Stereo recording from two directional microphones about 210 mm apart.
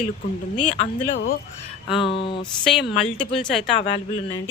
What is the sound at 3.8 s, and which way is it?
Speech, 30° left (ahead or behind).